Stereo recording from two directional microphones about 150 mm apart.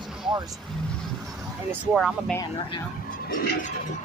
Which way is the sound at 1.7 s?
5° right (ahead or behind).